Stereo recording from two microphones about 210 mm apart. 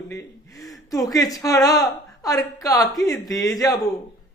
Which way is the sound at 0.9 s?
15° left (ahead or behind).